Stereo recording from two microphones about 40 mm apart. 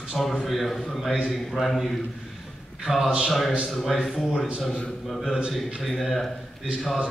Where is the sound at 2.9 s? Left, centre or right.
Centre.